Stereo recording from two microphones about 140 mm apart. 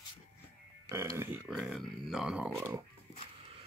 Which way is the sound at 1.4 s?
5° right (ahead or behind).